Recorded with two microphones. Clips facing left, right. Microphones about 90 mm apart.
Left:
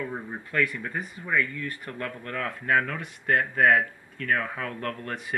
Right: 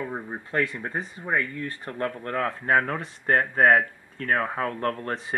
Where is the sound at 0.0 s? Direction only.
30° right (ahead or behind).